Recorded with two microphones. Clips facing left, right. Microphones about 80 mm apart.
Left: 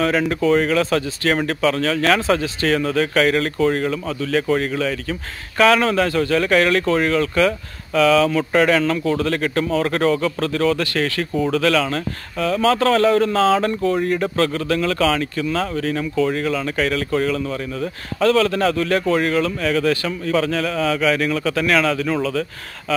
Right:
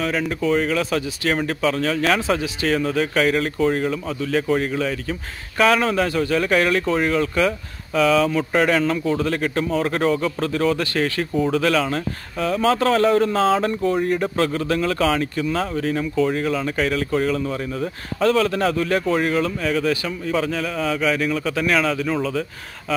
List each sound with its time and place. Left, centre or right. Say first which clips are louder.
0.0 s a man's voice: left 4 dB; centre